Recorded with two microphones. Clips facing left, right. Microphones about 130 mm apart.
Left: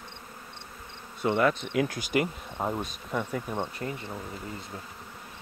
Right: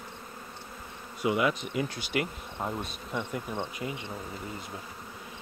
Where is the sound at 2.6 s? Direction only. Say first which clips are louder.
Left 3 dB; 15° left (ahead or behind).